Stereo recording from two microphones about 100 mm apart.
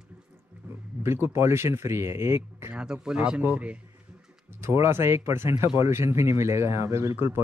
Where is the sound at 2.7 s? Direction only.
5° right (ahead or behind).